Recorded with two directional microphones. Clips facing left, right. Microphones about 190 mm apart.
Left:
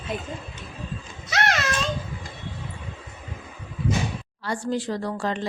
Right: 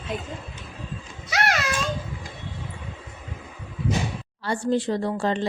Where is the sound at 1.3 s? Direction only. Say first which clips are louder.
Even; 10° right (ahead or behind).